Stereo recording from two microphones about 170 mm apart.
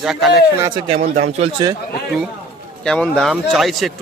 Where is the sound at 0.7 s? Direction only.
35° right (ahead or behind).